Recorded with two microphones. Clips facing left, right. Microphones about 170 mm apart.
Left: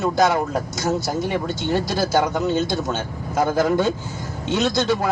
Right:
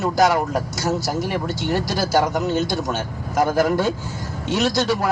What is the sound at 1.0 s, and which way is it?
A man's voice, 20° left (ahead or behind).